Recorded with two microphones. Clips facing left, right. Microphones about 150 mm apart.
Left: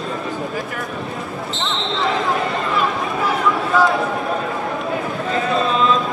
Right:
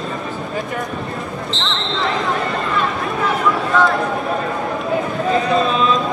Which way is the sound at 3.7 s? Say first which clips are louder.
Even; 5° left (ahead or behind).